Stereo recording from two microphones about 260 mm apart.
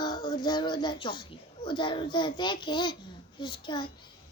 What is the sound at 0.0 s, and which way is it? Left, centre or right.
Speech, centre.